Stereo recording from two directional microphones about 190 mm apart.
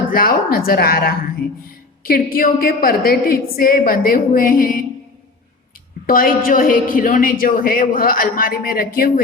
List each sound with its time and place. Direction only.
0.1 s a woman's voice: 50° left (ahead or behind)
6.1 s a woman's voice: 50° left (ahead or behind)